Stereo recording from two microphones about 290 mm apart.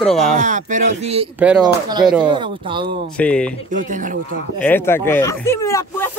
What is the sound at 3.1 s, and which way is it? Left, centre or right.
Speech, centre.